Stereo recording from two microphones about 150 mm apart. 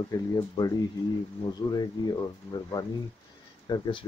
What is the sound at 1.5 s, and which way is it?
Speech, 25° left (ahead or behind).